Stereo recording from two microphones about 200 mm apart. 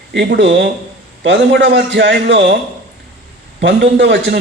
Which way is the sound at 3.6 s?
60° right (ahead or behind).